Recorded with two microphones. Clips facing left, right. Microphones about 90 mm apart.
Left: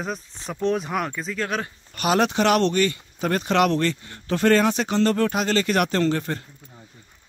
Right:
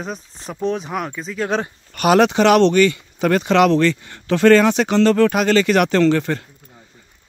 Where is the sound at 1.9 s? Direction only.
80° right.